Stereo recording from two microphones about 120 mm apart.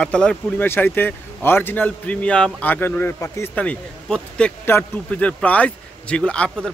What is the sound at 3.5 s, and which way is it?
Speech, 10° left (ahead or behind).